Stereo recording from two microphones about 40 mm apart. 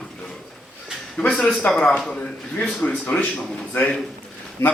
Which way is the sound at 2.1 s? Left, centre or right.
Left.